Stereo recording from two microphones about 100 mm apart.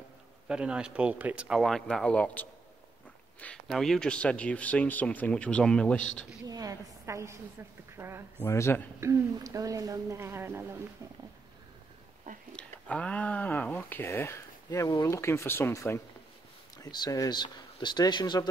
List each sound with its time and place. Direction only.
0.5 s speech: 10° right (ahead or behind)
1.6 s speech: 5° left (ahead or behind)
3.3 s a sound: 15° left (ahead or behind)
3.6 s speech: centre (ahead or behind)
6.4 s a sound: 40° right (ahead or behind)
8.0 s a woman's voice: 25° right (ahead or behind)
8.5 s speech: 25° left (ahead or behind)
9.0 s a woman's voice: 30° right (ahead or behind)
12.5 s speech: 10° left (ahead or behind); by 16.0 s 30° left (ahead or behind)
16.7 s speech: 40° left (ahead or behind)